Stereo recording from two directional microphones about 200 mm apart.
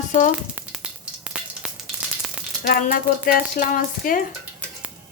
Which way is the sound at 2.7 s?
45° left (ahead or behind).